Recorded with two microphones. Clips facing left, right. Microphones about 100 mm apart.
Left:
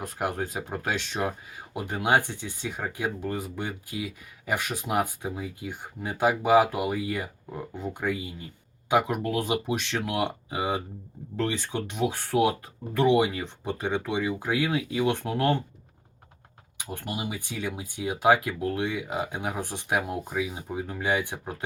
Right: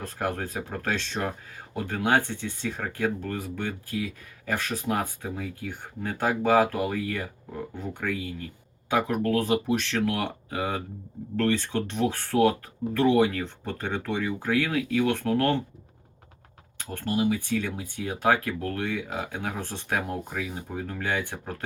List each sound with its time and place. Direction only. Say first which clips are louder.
0.0 s speech: even; 15° left (ahead or behind)
16.7 s speech: right 6 dB; 15° left (ahead or behind)